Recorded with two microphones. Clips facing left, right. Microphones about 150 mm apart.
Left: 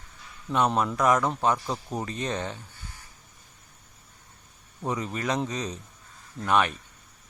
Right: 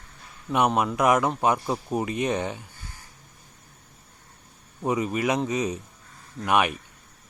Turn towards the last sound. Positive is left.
turn(degrees=-15)  # may be behind; listen again after turning